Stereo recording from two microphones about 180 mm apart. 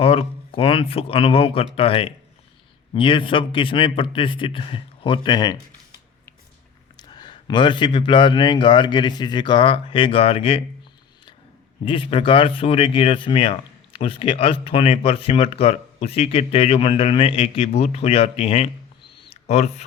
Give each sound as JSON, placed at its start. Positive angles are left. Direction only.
{"t": 0.0, "sound": "speech", "side_deg": 30}
{"t": 7.1, "sound": "speech", "side_deg": 25}
{"t": 11.9, "sound": "speech", "side_deg": 30}
{"t": 19.3, "sound": "a sound", "side_deg": 40}